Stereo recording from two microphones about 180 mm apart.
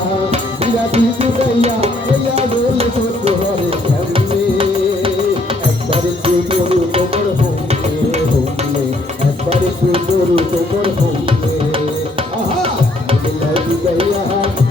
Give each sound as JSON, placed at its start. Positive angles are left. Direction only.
{"t": 0.3, "sound": "music", "side_deg": -35}
{"t": 3.2, "sound": "music", "side_deg": -30}
{"t": 5.9, "sound": "music", "side_deg": -30}
{"t": 9.5, "sound": "music", "side_deg": -30}